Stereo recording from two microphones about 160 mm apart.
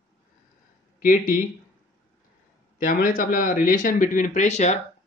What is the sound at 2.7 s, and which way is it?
Speech, 60° left (ahead or behind).